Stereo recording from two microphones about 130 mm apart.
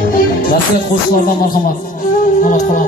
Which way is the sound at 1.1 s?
90° left.